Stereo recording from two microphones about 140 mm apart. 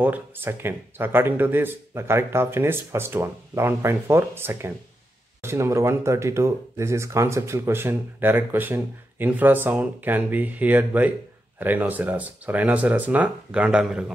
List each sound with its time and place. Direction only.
0.0 s speech: 15° right (ahead or behind)